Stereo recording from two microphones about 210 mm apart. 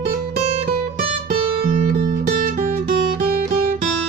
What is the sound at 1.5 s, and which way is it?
Music, 45° right (ahead or behind).